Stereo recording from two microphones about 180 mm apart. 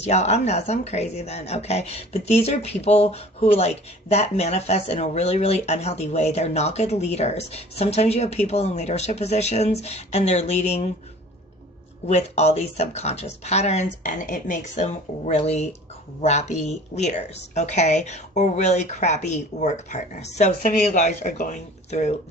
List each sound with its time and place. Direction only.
0.0 s speech: 35° left (ahead or behind)
12.0 s speech: 35° left (ahead or behind)